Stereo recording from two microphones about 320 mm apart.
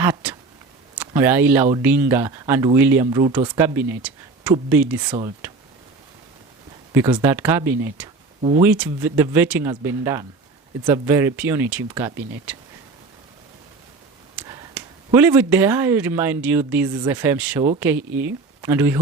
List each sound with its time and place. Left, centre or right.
0.0 s speech: centre
6.9 s speech: centre
8.4 s speech: centre
8.6 s speech: centre
14.3 s speech: centre